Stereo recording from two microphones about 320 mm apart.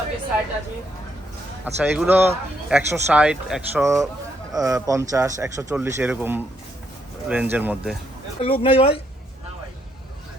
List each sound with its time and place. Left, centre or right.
1.6 s speech: centre
8.4 s speech: centre